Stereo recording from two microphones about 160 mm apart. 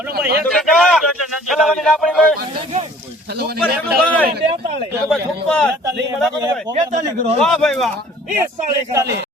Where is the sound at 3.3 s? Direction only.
85° right.